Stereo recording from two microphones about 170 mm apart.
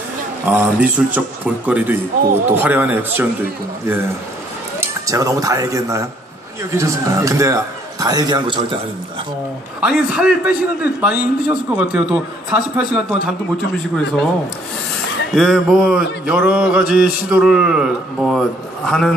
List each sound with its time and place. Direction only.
0.5 s a man's voice: 10° right (ahead or behind)
4.7 s a man's voice: 20° right (ahead or behind)
9.8 s a man's voice: 5° right (ahead or behind)
15.3 s mantra: centre (ahead or behind)